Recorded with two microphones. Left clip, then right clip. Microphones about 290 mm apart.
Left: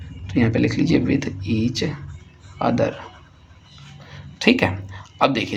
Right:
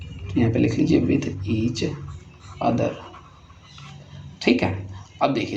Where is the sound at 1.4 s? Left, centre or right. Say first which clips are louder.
Left 2 dB; left.